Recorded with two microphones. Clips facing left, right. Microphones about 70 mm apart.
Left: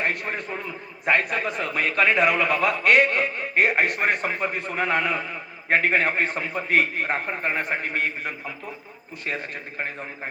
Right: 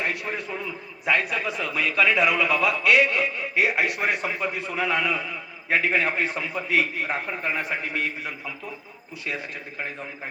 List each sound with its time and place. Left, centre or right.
0.0 s a man's voice: left